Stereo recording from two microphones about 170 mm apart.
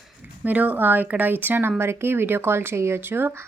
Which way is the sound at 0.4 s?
10° right (ahead or behind).